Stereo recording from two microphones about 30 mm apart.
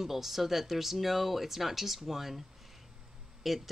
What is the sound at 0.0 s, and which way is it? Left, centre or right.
Speech, centre.